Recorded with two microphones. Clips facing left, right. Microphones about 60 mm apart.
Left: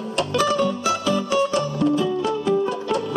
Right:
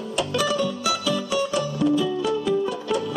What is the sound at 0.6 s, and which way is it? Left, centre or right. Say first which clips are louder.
Music: left 3 dB; left.